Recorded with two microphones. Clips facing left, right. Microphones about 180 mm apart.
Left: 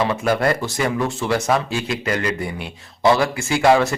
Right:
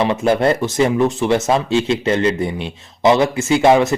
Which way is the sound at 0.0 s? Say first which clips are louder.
Right 4 dB; 20° right (ahead or behind).